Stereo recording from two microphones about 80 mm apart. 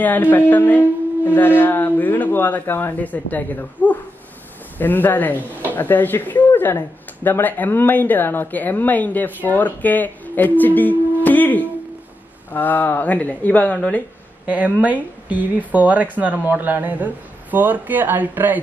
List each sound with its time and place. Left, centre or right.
0.0 s speech: left
14.4 s speech: centre